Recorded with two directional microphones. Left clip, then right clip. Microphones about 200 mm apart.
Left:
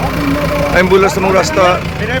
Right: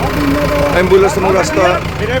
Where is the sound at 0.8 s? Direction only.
Centre (ahead or behind).